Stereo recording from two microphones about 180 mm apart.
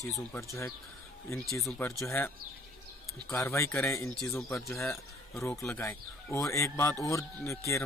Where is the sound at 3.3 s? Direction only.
15° left (ahead or behind).